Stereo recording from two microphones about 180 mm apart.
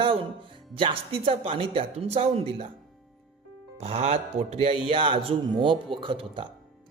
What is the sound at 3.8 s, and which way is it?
A man's voice, 35° right (ahead or behind).